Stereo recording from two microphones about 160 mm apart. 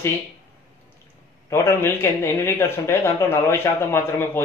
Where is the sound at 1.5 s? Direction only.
15° left (ahead or behind).